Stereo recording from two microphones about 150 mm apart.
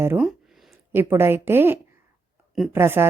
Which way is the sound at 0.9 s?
15° right (ahead or behind).